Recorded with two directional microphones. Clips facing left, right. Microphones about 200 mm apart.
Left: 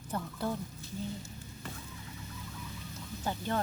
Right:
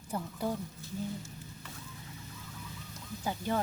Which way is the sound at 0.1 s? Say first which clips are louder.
Right 1 dB; 15° right (ahead or behind).